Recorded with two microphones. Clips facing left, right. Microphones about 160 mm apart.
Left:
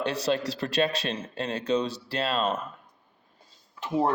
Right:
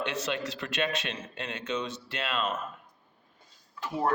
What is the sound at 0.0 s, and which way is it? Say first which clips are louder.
Speech: left 5 dB; 35° left (ahead or behind).